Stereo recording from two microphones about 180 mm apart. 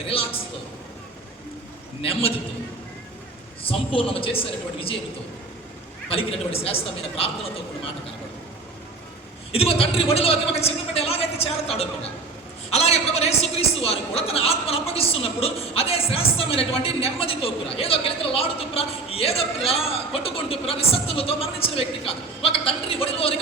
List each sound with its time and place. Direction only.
2.0 s a man's voice: 30° left (ahead or behind)
3.6 s a man's voice: 30° left (ahead or behind)
6.1 s a man's voice: 35° left (ahead or behind)
9.5 s a man's voice: 35° left (ahead or behind)